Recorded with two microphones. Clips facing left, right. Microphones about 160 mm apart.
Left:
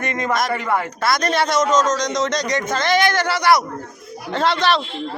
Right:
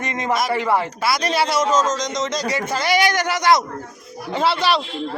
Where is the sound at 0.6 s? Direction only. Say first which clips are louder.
Right 2 dB; 30° right (ahead or behind).